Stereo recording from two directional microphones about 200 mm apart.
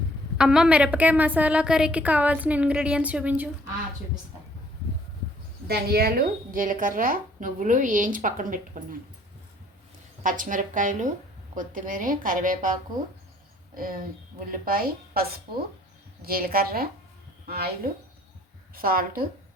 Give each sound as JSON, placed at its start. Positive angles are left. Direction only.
{"t": 0.3, "sound": "a woman's voice", "side_deg": -5}
{"t": 5.6, "sound": "a woman's voice", "side_deg": -50}
{"t": 10.2, "sound": "a woman's voice", "side_deg": -40}
{"t": 13.7, "sound": "a woman's voice", "side_deg": -45}
{"t": 18.7, "sound": "a woman's voice", "side_deg": -45}